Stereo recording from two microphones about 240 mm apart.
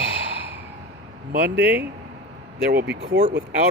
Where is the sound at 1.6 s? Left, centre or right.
Centre.